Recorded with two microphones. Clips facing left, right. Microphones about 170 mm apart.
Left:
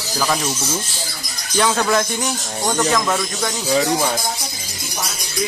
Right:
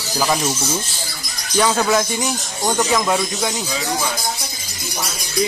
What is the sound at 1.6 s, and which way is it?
Speech, 5° right (ahead or behind).